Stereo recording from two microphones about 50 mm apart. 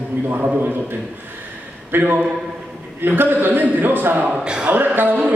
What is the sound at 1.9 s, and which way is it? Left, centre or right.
A man's voice, right.